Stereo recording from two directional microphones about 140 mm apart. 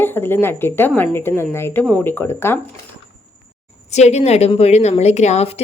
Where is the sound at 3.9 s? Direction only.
50° left (ahead or behind).